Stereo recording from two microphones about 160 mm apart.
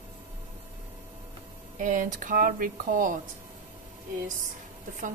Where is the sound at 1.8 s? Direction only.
55° right (ahead or behind).